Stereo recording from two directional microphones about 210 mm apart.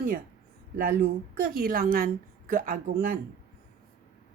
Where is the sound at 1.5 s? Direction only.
45° right (ahead or behind).